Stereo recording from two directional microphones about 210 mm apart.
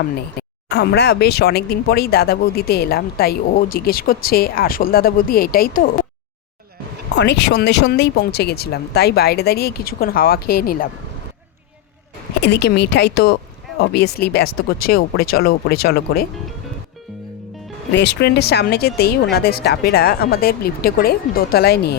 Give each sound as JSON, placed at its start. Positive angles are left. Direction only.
{"t": 0.4, "sound": "a sound", "side_deg": 50}
{"t": 0.7, "sound": "speech", "side_deg": 50}
{"t": 7.2, "sound": "speech", "side_deg": 55}
{"t": 12.4, "sound": "speech", "side_deg": 50}
{"t": 17.9, "sound": "speech", "side_deg": 55}